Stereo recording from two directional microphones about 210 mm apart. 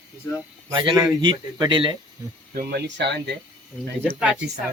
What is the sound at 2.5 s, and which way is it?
Speech, 45° right (ahead or behind).